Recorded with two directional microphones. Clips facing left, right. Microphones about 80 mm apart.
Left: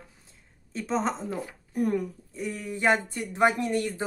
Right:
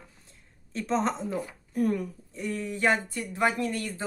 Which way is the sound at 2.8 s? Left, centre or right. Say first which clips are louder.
Left 2 dB; left.